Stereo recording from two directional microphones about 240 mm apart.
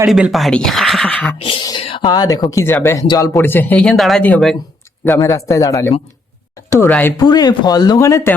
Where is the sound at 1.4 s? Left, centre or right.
Centre.